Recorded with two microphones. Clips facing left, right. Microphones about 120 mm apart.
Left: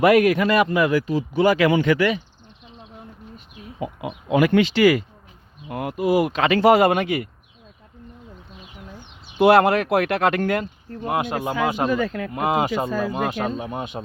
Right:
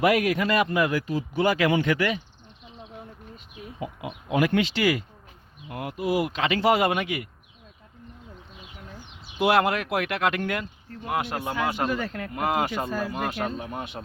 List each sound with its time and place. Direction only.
0.0 s speech: 60° left (ahead or behind); by 2.1 s 90° left
4.0 s speech: 90° left; by 5.0 s 60° left (ahead or behind)
5.6 s speech: 80° left
6.0 s speech: 50° left (ahead or behind)
9.4 s speech: 40° left (ahead or behind)
11.2 s speech: 20° left (ahead or behind)